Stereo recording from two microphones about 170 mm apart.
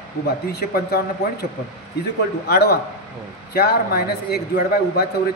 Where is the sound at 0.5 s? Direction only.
70° left (ahead or behind).